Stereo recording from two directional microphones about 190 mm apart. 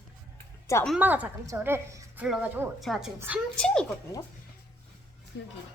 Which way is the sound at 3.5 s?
5° left (ahead or behind).